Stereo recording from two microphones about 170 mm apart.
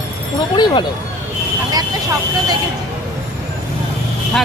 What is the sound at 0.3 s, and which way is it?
Speech, 25° left (ahead or behind).